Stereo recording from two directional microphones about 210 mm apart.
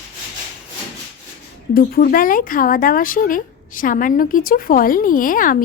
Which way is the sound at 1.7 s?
45° left (ahead or behind).